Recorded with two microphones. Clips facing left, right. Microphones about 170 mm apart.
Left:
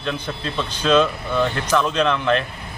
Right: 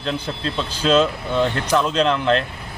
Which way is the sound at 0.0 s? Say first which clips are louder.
Right 1 dB; 30° right (ahead or behind).